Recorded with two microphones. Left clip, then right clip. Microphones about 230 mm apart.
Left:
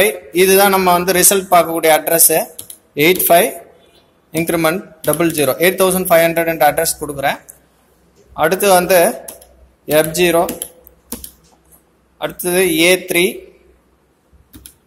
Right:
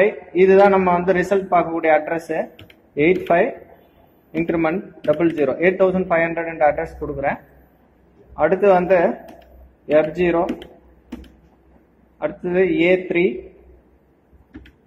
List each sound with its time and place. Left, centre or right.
0.0 s speech: left
8.4 s speech: left
12.2 s speech: left